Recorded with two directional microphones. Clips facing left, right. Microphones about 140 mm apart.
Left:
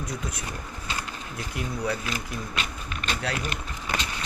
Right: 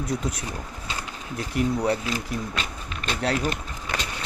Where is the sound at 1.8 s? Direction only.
35° right (ahead or behind).